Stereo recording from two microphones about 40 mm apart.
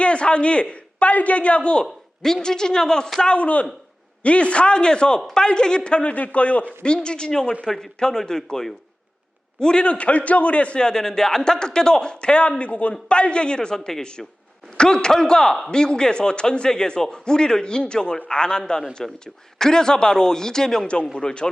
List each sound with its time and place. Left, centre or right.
0.0 s a man's voice: left
2.2 s a man's voice: centre
3.4 s a man's voice: left
6.8 s a man's voice: left
9.8 s a man's voice: left